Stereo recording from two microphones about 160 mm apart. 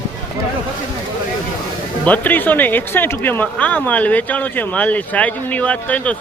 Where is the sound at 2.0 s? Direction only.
10° left (ahead or behind).